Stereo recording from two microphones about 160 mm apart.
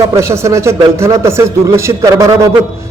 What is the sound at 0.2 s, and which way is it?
A man's voice, 15° right (ahead or behind).